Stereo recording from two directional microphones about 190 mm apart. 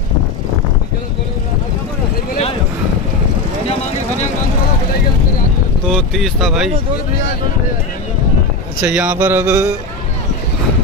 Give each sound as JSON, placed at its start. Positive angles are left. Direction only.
{"t": 5.9, "sound": "speech", "side_deg": 0}
{"t": 8.8, "sound": "mantra", "side_deg": -5}